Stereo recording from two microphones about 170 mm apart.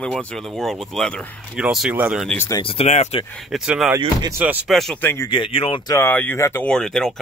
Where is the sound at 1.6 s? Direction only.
5° right (ahead or behind).